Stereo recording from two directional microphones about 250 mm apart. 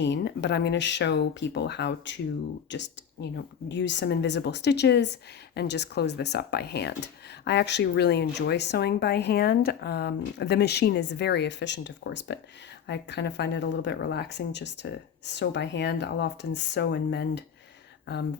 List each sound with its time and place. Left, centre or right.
0.0 s speech: left